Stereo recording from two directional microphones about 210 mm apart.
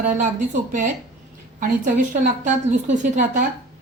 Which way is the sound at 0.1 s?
35° right (ahead or behind).